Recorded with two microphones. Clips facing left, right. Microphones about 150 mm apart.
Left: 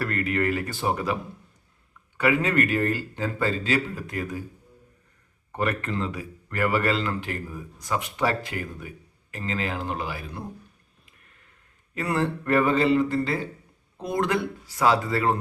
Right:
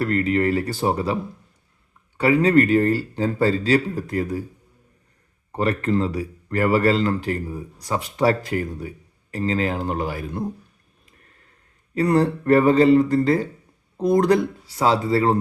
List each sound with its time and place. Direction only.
0.0 s a man's voice: 30° right (ahead or behind)
2.1 s a man's voice: 35° right (ahead or behind)
5.5 s a man's voice: 35° right (ahead or behind)
11.9 s a man's voice: 40° right (ahead or behind)
14.8 s speech: 30° right (ahead or behind)